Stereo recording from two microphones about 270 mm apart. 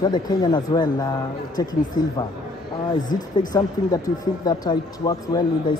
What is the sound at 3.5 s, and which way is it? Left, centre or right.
Speech, centre.